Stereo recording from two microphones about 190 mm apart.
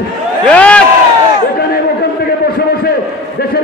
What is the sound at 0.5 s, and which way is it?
Speech, 5° left (ahead or behind).